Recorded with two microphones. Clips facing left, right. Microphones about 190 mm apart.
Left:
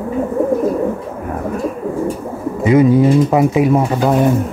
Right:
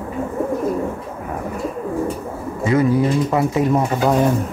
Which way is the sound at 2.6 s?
20° left (ahead or behind).